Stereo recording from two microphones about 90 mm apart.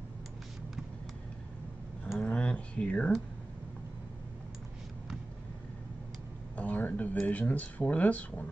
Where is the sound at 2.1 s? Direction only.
10° left (ahead or behind).